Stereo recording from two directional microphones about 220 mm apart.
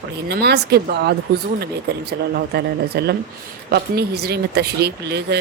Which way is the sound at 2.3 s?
45° right (ahead or behind).